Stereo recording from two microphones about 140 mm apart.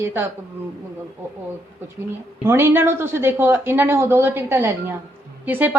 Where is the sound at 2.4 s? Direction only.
15° right (ahead or behind).